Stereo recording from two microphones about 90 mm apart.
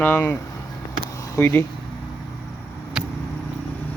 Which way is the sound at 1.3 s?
30° left (ahead or behind).